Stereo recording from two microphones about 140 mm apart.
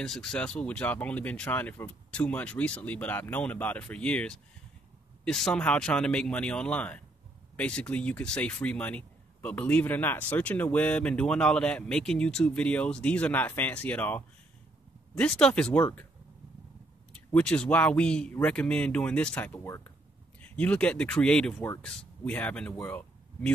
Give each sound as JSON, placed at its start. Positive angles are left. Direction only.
{"t": 0.0, "sound": "speech", "side_deg": 5}
{"t": 17.3, "sound": "speech", "side_deg": 10}
{"t": 19.6, "sound": "speech", "side_deg": 20}
{"t": 20.5, "sound": "speech", "side_deg": 10}